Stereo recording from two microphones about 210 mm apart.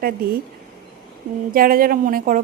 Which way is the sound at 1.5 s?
45° right (ahead or behind).